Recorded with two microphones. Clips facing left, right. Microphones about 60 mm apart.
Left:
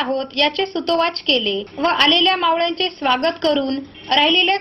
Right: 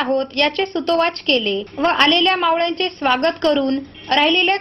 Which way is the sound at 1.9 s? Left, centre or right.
Right.